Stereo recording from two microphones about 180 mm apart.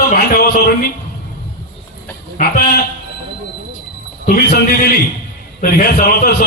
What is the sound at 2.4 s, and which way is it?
Speech, 55° left (ahead or behind).